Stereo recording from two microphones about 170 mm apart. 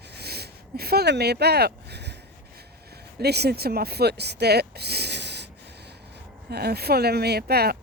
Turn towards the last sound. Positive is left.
turn(degrees=-65)  # may be behind; listen again after turning